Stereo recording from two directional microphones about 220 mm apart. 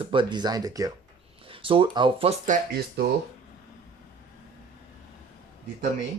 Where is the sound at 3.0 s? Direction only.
50° right (ahead or behind).